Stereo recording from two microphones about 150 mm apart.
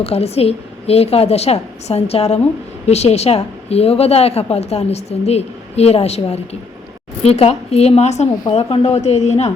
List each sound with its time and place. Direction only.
0.0 s a woman's voice: 45° left (ahead or behind)